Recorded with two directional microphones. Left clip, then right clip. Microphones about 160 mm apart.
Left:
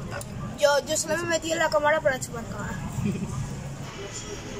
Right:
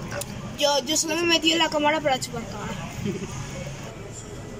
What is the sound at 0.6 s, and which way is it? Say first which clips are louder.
Speech: even; 10° right (ahead or behind).